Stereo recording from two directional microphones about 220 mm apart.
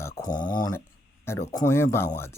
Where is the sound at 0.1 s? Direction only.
35° left (ahead or behind).